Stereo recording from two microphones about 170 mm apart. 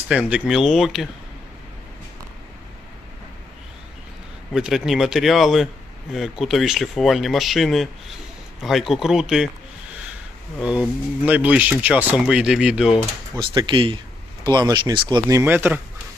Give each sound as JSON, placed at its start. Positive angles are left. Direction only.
{"t": 0.1, "sound": "speech", "side_deg": -5}
{"t": 4.5, "sound": "speech", "side_deg": -5}
{"t": 10.6, "sound": "speech", "side_deg": -5}
{"t": 13.4, "sound": "speech", "side_deg": -30}